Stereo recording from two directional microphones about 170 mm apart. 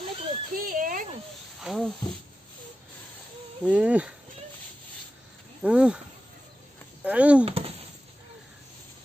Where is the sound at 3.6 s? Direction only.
5° right (ahead or behind).